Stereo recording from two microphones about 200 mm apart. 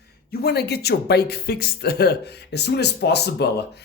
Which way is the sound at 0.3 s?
55° left (ahead or behind).